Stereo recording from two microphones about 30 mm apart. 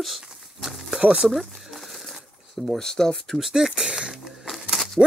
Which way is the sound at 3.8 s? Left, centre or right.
Right.